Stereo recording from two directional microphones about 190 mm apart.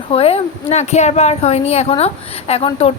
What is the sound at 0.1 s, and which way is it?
A woman's voice, 30° left (ahead or behind).